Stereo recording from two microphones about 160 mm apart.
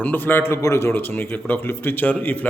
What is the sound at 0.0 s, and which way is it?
A man's voice, 10° left (ahead or behind).